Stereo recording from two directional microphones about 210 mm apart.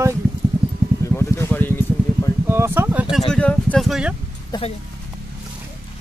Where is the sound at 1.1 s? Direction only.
10° left (ahead or behind).